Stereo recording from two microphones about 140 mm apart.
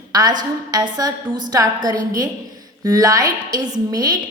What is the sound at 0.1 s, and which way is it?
A woman's voice, 30° right (ahead or behind).